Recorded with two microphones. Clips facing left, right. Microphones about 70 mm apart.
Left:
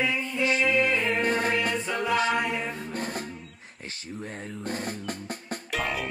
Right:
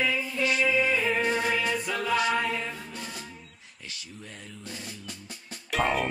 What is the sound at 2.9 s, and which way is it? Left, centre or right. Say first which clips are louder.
Music: left 7 dB; left.